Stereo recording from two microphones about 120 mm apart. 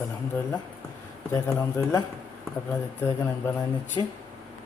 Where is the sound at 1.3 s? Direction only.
25° left (ahead or behind).